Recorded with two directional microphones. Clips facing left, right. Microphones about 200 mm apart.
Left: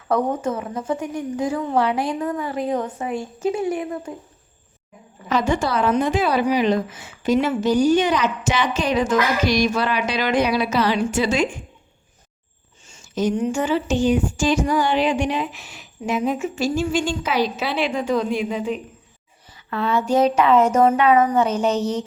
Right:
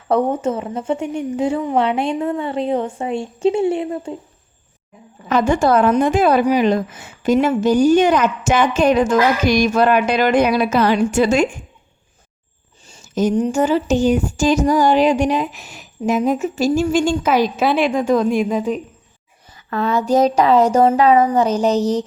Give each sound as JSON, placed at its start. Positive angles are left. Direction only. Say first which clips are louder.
{"t": 0.1, "sound": "a woman's voice", "louder": "right 4 dB", "side_deg": -25}
{"t": 5.3, "sound": "speech", "louder": "right 6 dB", "side_deg": -50}
{"t": 12.8, "sound": "a woman's voice", "louder": "right 4 dB", "side_deg": -40}